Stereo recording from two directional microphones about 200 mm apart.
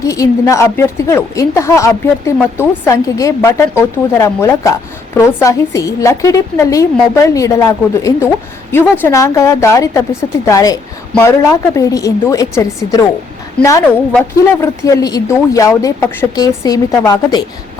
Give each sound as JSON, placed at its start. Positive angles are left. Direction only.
{"t": 0.1, "sound": "a woman's voice", "side_deg": 15}